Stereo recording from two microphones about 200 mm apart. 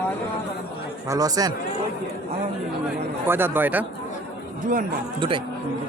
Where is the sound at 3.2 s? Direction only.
10° right (ahead or behind).